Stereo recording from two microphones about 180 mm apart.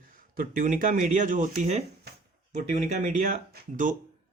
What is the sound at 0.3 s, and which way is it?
Speech, 50° right (ahead or behind).